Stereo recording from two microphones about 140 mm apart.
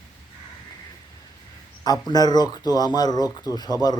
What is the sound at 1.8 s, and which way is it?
Speech, 30° left (ahead or behind).